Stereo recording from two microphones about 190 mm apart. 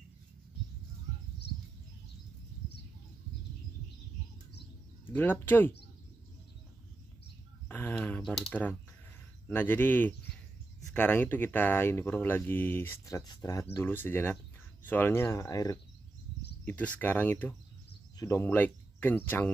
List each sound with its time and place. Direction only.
5.0 s speech: 10° left (ahead or behind)
7.6 s typing: 10° left (ahead or behind)
9.5 s speech: 10° left (ahead or behind)